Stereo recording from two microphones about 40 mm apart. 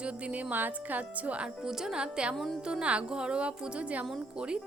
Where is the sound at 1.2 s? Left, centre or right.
Right.